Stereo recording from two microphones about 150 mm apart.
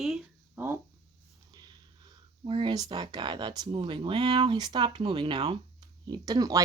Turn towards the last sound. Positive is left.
turn(degrees=-25)  # may be behind; listen again after turning